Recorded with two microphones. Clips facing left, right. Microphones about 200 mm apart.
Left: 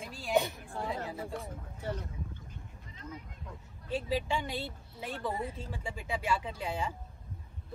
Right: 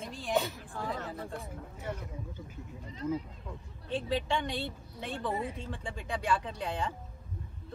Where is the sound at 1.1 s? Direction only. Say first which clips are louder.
Left 1 dB; centre (ahead or behind).